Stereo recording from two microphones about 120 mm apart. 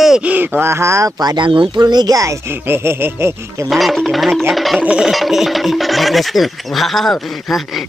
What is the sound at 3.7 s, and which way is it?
Speech, centre (ahead or behind).